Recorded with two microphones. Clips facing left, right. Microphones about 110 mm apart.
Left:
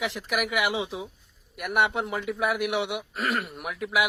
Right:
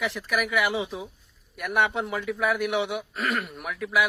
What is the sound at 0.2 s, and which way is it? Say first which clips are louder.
Speech: right 2 dB; 15° left (ahead or behind).